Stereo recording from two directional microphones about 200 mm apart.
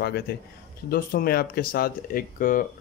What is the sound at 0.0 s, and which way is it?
A man's voice, 55° left (ahead or behind).